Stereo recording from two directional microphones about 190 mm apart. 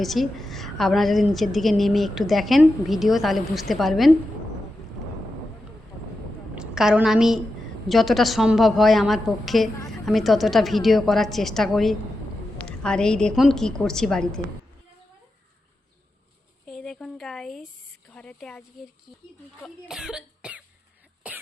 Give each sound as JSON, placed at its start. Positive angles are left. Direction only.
{"t": 0.0, "sound": "a woman's voice", "side_deg": 0}
{"t": 6.6, "sound": "a woman's voice", "side_deg": -5}
{"t": 16.6, "sound": "a woman's voice", "side_deg": 0}
{"t": 19.6, "sound": "cough", "side_deg": 0}